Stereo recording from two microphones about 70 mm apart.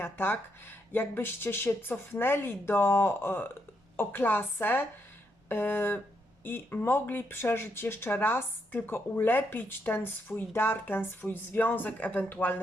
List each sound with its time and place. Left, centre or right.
0.0 s speech: left